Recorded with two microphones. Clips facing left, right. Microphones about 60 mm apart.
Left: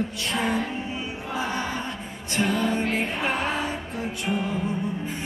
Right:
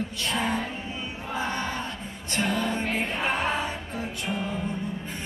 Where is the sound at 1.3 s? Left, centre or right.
Centre.